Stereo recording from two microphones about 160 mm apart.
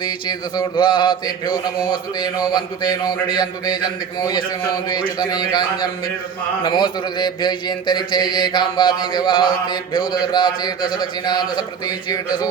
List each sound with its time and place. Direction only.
0.0 s speech: 25° left (ahead or behind)